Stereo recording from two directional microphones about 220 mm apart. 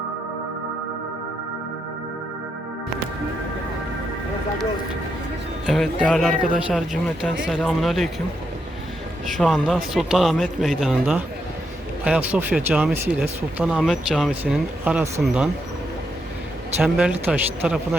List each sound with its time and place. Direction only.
5.6 s speech: centre (ahead or behind)
6.3 s a man's voice: 40° right (ahead or behind)
6.7 s speech: centre (ahead or behind)
9.4 s speech: centre (ahead or behind)
16.7 s speech: 5° right (ahead or behind)